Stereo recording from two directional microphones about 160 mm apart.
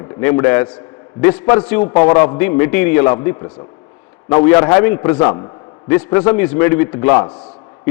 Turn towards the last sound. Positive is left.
turn(degrees=15)  # may be behind; listen again after turning